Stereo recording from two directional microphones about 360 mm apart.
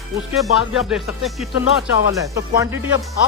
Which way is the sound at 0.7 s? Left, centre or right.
Centre.